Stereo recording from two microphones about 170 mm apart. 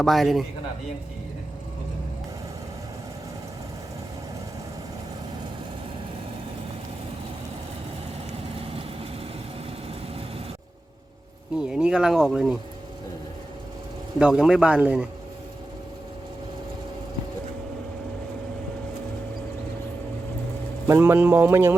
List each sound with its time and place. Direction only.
0.0 s speech: centre (ahead or behind)
8.4 s vehicle: 35° right (ahead or behind)
11.6 s speech: 5° right (ahead or behind)
14.2 s speech: 5° right (ahead or behind)
20.8 s speech: 15° right (ahead or behind)